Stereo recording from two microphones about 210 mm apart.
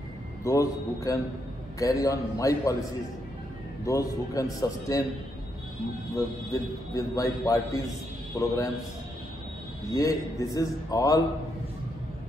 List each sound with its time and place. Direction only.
0.4 s a man's voice: 15° left (ahead or behind)
3.8 s a man's voice: 15° left (ahead or behind)
6.1 s a man's voice: 15° left (ahead or behind)
9.9 s a man's voice: 15° left (ahead or behind)